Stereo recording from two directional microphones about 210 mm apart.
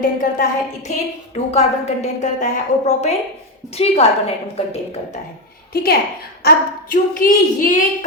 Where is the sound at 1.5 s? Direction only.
30° left (ahead or behind).